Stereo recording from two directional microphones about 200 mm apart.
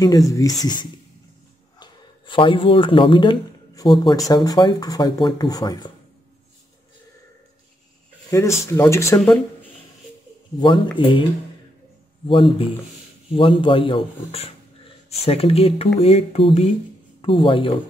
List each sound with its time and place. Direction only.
0.0 s a man's voice: 15° left (ahead or behind)
8.3 s speech: 15° left (ahead or behind)
10.6 s a man's voice: 25° left (ahead or behind)
13.4 s a man's voice: 25° left (ahead or behind)